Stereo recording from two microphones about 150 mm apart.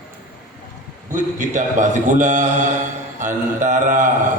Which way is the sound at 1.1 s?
55° right (ahead or behind).